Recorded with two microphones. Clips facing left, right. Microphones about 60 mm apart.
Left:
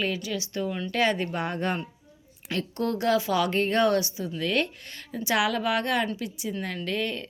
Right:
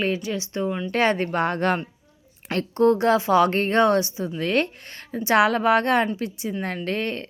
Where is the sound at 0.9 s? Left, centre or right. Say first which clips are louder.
Right 4 dB; right.